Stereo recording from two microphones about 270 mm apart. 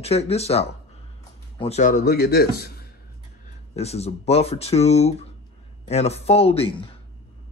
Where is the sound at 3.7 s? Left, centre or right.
Left.